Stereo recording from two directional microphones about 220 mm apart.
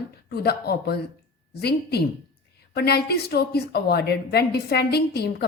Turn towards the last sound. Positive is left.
turn(degrees=45)  # may be behind; listen again after turning